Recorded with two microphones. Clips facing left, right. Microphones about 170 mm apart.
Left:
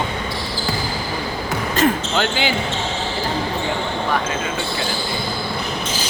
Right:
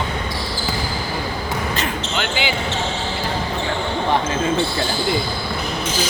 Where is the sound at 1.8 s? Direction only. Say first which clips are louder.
Left 6 dB; 45° left (ahead or behind).